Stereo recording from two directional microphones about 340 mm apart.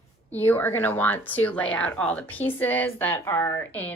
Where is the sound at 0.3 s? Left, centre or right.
Centre.